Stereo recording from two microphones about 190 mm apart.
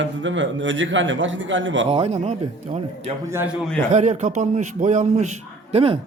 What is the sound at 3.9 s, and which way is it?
A man's voice, 40° right (ahead or behind).